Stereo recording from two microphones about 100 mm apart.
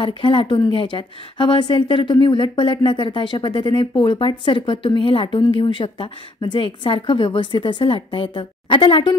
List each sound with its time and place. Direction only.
0.2 s a woman's voice: 60° left (ahead or behind)